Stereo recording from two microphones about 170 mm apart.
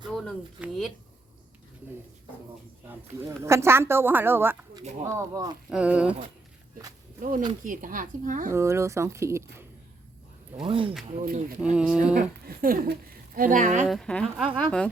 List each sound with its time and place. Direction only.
0.1 s a sound: 5° left (ahead or behind)
0.6 s speech: 5° right (ahead or behind)
3.2 s speech: 15° right (ahead or behind)
5.6 s speech: 5° right (ahead or behind)
7.2 s speech: 50° right (ahead or behind)
8.5 s speech: 15° right (ahead or behind)
10.6 s speech: 30° right (ahead or behind)
11.2 s speech: 50° right (ahead or behind)
11.6 s speech: 5° right (ahead or behind)
12.1 s speech: 55° right (ahead or behind)
13.8 s speech: centre (ahead or behind)